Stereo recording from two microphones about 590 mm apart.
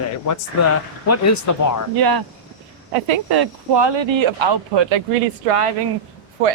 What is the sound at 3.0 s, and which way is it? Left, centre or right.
Speech, right.